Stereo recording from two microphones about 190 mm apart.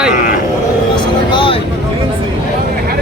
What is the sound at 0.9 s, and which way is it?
Vehicle, 25° left (ahead or behind).